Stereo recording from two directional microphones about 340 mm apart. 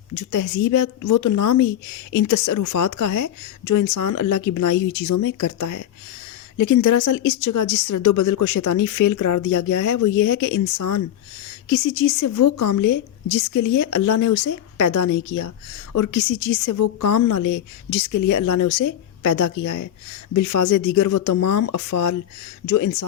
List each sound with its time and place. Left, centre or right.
0.2 s speech: left
12.0 s speech: left